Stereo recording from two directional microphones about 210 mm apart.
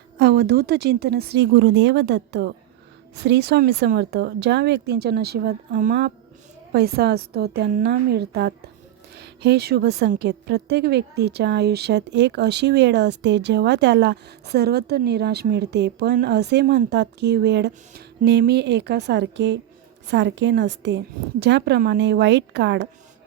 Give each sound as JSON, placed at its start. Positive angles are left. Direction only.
{"t": 0.2, "sound": "a woman's voice", "side_deg": -50}